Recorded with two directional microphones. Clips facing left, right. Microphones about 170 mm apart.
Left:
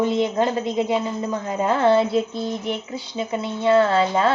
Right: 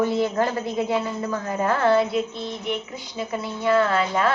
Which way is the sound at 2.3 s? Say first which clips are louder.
Left 3 dB; 40° left (ahead or behind).